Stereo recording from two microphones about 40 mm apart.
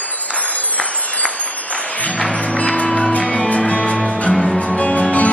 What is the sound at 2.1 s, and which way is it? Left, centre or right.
Music, left.